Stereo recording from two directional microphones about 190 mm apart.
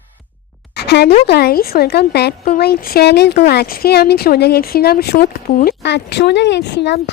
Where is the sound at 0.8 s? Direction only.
60° left (ahead or behind).